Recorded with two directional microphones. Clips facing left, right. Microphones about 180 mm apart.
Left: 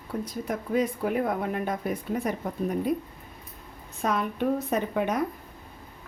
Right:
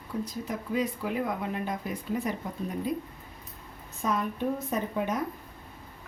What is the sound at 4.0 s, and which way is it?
A woman's voice, 70° left (ahead or behind).